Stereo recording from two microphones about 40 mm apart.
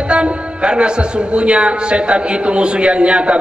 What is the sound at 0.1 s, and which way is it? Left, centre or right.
A man's voice, right.